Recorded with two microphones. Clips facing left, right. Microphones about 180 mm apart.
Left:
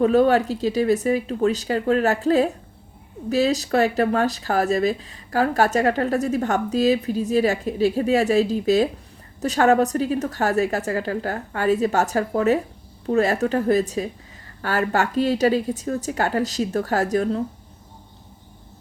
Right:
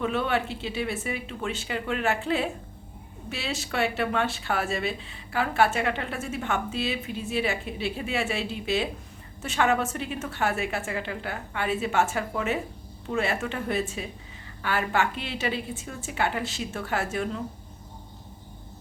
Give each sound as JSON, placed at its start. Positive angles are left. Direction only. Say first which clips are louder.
{"t": 0.0, "sound": "speech", "louder": "left 10 dB", "side_deg": 40}